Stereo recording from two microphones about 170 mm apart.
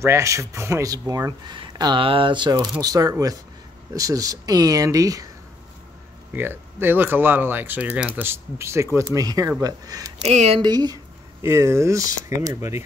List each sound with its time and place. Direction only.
0.0 s speech: 15° right (ahead or behind)
6.3 s speech: 10° right (ahead or behind)
10.2 s speech: 40° right (ahead or behind)
10.6 s speech: 25° right (ahead or behind)